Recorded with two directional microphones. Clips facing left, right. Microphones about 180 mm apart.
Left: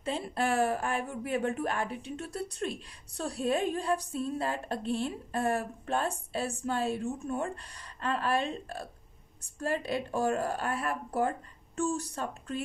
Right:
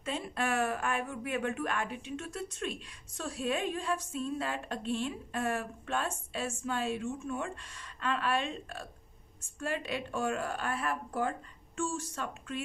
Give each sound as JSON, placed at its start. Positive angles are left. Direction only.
{"t": 0.0, "sound": "speech", "side_deg": 30}